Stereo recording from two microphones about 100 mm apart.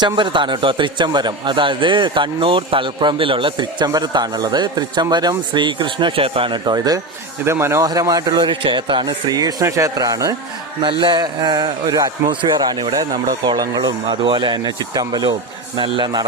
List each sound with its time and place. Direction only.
0.0 s a man's voice: 50° right (ahead or behind)
3.8 s a man's voice: 45° right (ahead or behind)
7.4 s a man's voice: 25° right (ahead or behind)
7.9 s speech: 35° right (ahead or behind)
11.0 s a man's voice: 50° right (ahead or behind)